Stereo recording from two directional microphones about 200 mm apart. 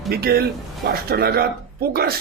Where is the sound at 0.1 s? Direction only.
50° right (ahead or behind).